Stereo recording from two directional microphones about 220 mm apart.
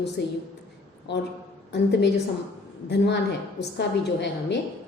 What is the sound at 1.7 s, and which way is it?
Speech, 50° left (ahead or behind).